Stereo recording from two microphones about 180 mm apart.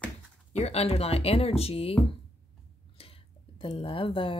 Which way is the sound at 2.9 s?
30° left (ahead or behind).